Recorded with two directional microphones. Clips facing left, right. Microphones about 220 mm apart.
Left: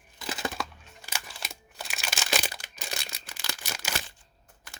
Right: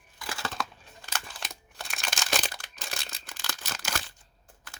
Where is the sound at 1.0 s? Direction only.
10° left (ahead or behind).